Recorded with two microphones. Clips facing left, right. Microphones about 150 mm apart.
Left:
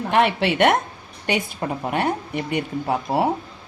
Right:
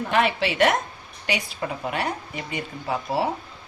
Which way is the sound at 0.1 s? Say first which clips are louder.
Left 4 dB; 60° left (ahead or behind).